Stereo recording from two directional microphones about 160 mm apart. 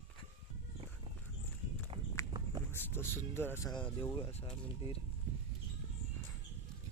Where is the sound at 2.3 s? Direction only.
25° right (ahead or behind).